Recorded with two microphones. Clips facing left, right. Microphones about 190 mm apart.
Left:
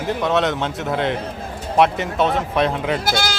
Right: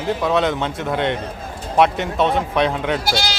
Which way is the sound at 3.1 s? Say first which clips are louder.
Even; 50° left (ahead or behind).